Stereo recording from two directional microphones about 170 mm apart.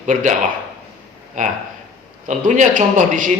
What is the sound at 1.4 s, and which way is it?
A man's voice, 50° right (ahead or behind).